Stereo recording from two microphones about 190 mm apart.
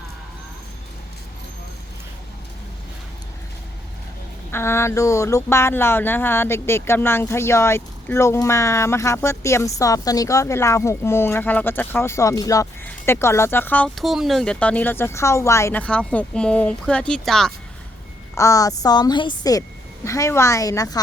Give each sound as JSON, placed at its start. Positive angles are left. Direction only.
{"t": 4.5, "sound": "speech", "side_deg": 15}
{"t": 18.3, "sound": "a woman's voice", "side_deg": 15}